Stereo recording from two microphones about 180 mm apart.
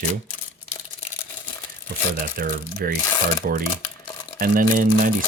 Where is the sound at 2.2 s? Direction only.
60° right (ahead or behind).